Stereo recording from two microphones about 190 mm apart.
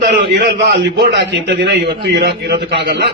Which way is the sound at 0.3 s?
65° right (ahead or behind).